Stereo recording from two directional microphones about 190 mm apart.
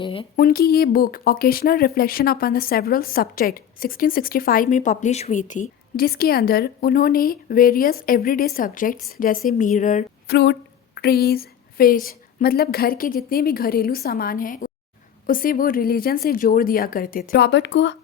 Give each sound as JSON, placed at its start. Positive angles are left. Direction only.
{"t": 0.0, "sound": "speech", "side_deg": 25}
{"t": 0.3, "sound": "speech", "side_deg": 50}
{"t": 10.2, "sound": "speech", "side_deg": 60}